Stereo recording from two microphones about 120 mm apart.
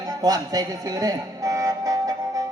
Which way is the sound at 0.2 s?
30° right (ahead or behind).